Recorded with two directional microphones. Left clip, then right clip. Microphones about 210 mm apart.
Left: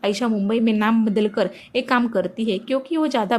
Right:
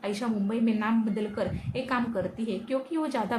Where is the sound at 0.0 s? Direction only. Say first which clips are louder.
Left 9 dB; 35° left (ahead or behind).